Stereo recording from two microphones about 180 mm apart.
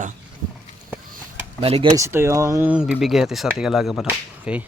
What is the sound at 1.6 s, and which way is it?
Speech, 35° right (ahead or behind).